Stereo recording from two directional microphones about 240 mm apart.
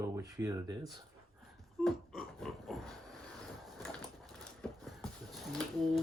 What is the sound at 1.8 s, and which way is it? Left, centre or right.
Pig, centre.